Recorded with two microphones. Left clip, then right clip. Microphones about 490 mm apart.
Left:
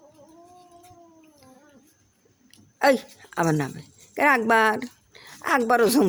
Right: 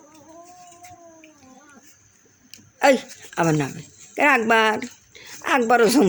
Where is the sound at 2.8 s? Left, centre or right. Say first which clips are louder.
Right 3 dB; left.